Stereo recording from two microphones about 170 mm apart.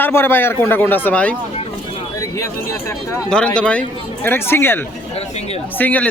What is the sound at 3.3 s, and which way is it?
A man's voice, 5° left (ahead or behind).